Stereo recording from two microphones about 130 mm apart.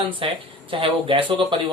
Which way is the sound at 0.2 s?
45° right (ahead or behind).